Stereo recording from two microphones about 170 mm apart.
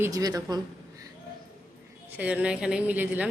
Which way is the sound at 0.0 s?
20° right (ahead or behind).